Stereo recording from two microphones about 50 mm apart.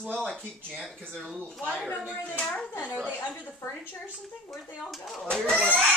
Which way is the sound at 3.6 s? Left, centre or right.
Left.